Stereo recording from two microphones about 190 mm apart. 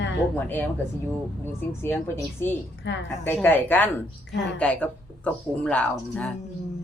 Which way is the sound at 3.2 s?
10° left (ahead or behind).